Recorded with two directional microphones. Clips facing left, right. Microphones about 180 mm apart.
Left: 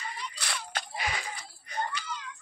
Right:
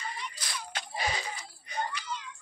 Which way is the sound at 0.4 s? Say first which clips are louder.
Left 2 dB; 70° left (ahead or behind).